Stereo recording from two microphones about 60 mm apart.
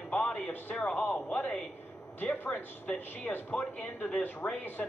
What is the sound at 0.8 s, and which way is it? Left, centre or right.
Speech, left.